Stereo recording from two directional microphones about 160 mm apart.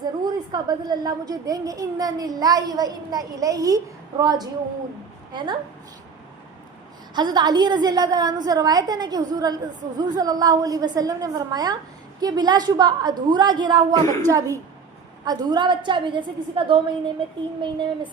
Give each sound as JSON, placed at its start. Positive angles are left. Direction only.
{"t": 0.0, "sound": "a woman's voice", "side_deg": -25}
{"t": 7.1, "sound": "a woman's voice", "side_deg": -25}